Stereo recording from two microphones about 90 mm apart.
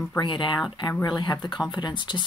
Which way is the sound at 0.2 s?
60° left (ahead or behind).